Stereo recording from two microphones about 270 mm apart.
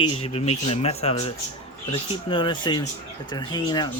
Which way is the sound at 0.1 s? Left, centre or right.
Left.